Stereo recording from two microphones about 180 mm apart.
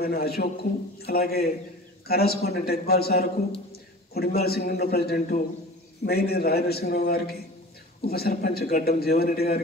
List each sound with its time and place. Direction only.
0.0 s a man's voice: 60° left (ahead or behind)